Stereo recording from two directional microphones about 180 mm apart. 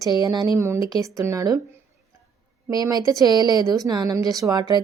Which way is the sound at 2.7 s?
20° right (ahead or behind).